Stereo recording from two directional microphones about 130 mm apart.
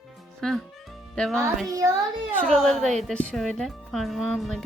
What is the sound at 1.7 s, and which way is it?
Speech, 25° right (ahead or behind).